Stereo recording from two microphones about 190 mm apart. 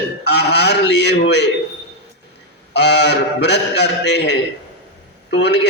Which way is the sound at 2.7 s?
65° left (ahead or behind).